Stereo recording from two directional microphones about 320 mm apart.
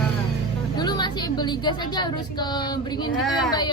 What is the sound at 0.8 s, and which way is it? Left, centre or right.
A woman's voice, centre.